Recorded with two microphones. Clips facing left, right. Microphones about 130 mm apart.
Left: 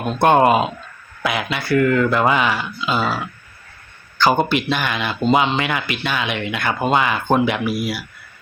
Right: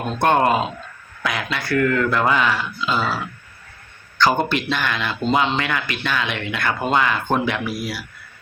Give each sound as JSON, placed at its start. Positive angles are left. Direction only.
{"t": 0.1, "sound": "a man's voice", "side_deg": 15}